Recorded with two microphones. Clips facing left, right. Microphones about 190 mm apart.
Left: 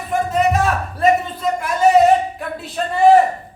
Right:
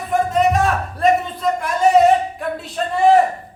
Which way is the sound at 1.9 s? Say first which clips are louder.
Left 1 dB; centre (ahead or behind).